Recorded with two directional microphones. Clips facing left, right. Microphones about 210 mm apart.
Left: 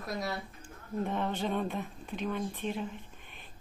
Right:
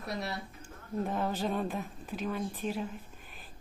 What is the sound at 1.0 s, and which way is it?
Speech, centre (ahead or behind).